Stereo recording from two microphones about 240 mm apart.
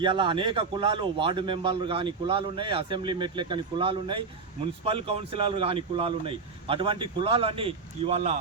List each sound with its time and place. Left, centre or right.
0.0 s a man's voice: centre